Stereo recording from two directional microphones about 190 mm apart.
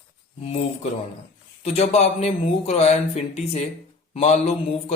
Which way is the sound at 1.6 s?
35° left (ahead or behind).